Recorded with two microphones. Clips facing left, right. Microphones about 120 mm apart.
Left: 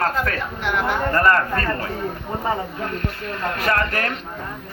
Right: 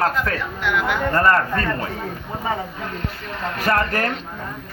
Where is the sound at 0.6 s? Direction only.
30° left (ahead or behind).